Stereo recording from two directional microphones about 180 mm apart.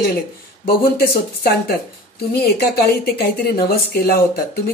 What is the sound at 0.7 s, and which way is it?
Speech, 60° left (ahead or behind).